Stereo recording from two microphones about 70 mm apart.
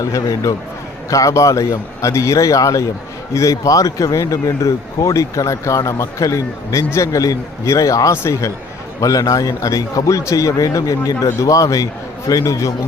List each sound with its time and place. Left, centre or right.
0.0 s speech: left
8.1 s speech: left
9.0 s speech: left